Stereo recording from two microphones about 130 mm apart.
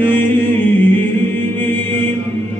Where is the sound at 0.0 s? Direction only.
15° left (ahead or behind).